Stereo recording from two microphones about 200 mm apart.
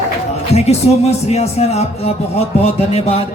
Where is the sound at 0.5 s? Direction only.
30° left (ahead or behind).